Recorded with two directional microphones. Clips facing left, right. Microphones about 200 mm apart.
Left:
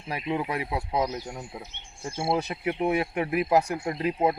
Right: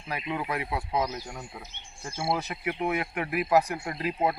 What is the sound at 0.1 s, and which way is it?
Speech, 25° left (ahead or behind).